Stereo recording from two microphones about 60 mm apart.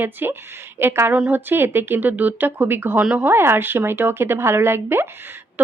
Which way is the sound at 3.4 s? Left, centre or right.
Right.